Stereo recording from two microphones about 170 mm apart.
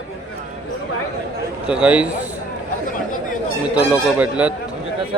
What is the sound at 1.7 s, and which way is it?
Speech, 5° right (ahead or behind).